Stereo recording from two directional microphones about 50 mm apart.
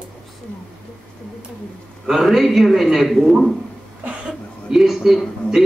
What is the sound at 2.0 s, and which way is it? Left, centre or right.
A man's voice, centre.